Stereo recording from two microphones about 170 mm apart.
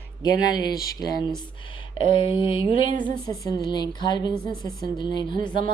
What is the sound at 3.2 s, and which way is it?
A woman's voice, 20° left (ahead or behind).